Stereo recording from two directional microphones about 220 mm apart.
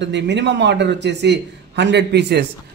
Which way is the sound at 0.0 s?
55° right (ahead or behind).